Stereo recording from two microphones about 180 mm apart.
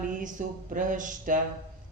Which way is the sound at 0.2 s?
45° right (ahead or behind).